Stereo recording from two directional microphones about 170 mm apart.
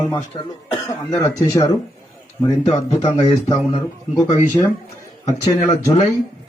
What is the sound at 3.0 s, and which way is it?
Speech, 35° left (ahead or behind).